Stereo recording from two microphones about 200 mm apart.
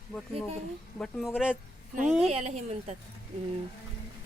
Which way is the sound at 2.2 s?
35° right (ahead or behind).